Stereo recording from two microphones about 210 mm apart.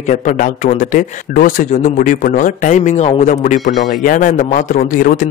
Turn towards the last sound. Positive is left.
turn(degrees=40)  # may be behind; listen again after turning